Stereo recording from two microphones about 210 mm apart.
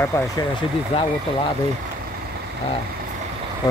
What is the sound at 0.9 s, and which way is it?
Speech, 25° left (ahead or behind).